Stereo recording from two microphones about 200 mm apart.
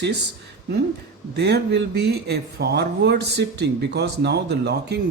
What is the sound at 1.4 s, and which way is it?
Speech, 55° right (ahead or behind).